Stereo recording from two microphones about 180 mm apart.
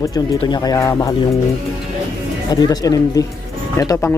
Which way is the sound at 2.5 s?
20° left (ahead or behind).